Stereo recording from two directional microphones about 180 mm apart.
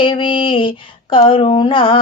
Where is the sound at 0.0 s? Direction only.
25° left (ahead or behind).